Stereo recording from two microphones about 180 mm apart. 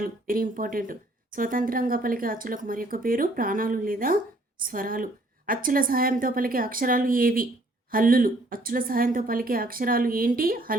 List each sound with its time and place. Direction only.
0.0 s speech: 50° right (ahead or behind)